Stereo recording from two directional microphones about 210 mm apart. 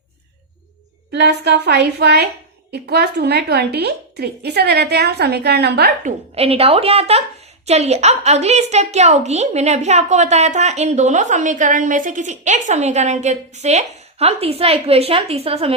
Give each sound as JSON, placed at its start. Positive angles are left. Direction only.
{"t": 1.1, "sound": "a woman's voice", "side_deg": -55}
{"t": 6.3, "sound": "a woman's voice", "side_deg": -30}